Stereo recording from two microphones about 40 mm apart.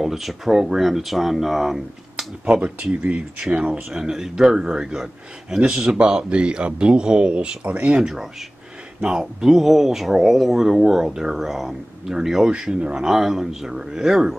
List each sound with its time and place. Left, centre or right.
0.0 s speech: centre
2.4 s speech: right
3.9 s speech: centre
5.6 s speech: right
7.6 s speech: right
9.2 s speech: centre
12.4 s speech: right